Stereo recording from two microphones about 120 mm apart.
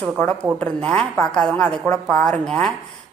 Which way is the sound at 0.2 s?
15° left (ahead or behind).